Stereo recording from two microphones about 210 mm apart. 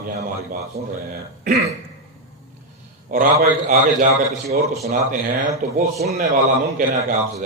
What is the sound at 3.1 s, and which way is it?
A man's voice, 40° right (ahead or behind).